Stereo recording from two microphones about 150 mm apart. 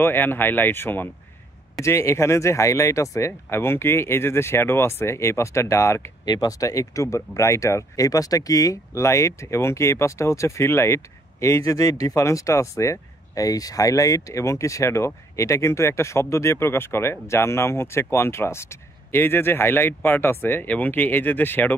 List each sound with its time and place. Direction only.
0.0 s speech: 15° left (ahead or behind)